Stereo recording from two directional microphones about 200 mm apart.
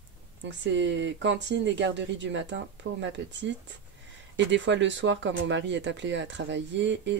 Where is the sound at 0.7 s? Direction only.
65° right (ahead or behind).